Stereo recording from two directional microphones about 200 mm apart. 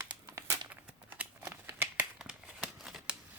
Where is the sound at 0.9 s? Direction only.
10° right (ahead or behind).